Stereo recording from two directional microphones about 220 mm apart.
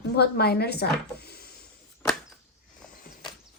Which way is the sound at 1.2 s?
45° left (ahead or behind).